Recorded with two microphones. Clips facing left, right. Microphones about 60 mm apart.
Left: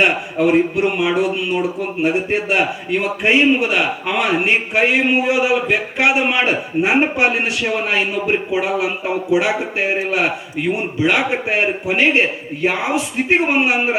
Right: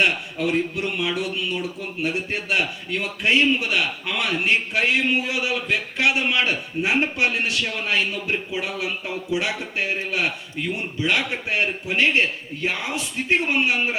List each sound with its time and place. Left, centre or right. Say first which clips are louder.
0.0 s a man's voice: left 6 dB; left